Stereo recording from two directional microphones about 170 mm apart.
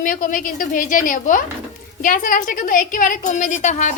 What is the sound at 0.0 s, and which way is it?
A woman's voice, 50° left (ahead or behind).